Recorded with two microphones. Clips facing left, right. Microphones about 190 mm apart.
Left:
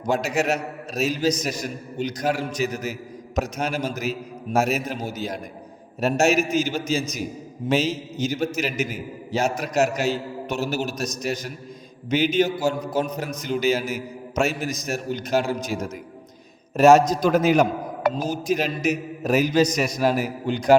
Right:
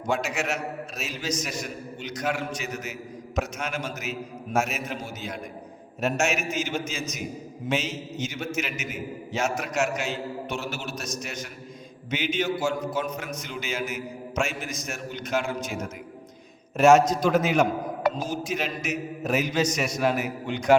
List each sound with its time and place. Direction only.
0.0 s a man's voice: 40° left (ahead or behind)